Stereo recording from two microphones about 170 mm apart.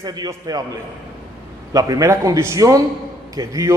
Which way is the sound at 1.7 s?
20° right (ahead or behind).